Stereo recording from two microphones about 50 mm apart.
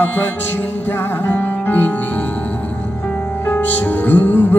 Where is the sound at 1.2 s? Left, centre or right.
Left.